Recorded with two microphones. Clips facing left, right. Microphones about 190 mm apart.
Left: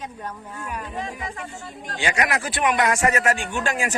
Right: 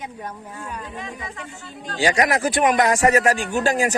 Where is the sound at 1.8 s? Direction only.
35° right (ahead or behind).